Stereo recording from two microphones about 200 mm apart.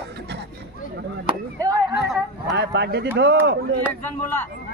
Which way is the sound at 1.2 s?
20° right (ahead or behind).